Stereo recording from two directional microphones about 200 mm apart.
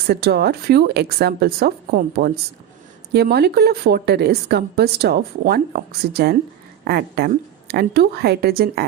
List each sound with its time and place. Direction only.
0.1 s a woman's voice: 50° right (ahead or behind)